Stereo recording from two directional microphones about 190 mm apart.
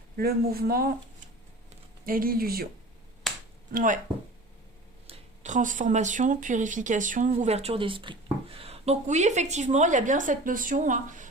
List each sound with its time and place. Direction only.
0.2 s speech: 55° right (ahead or behind)
2.0 s speech: 50° right (ahead or behind)
3.7 s speech: 45° right (ahead or behind)
5.0 s speech: 40° right (ahead or behind)